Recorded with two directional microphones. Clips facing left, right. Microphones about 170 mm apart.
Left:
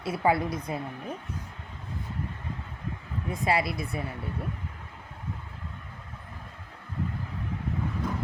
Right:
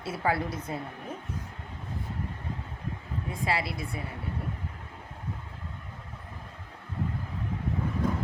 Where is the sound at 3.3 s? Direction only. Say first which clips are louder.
Left 4 dB; 20° left (ahead or behind).